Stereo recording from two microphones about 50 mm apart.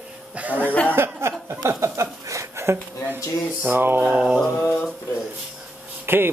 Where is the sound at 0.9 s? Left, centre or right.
Right.